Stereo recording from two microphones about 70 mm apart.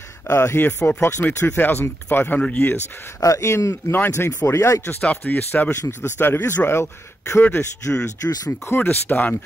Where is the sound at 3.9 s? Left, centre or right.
Left.